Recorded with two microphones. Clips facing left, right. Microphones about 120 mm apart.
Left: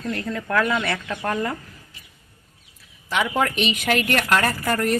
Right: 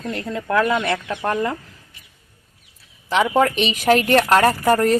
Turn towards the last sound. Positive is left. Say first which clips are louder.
# right 6 dB
turn(degrees=-35)  # may be behind; listen again after turning